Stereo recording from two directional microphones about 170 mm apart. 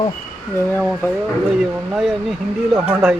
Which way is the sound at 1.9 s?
Centre (ahead or behind).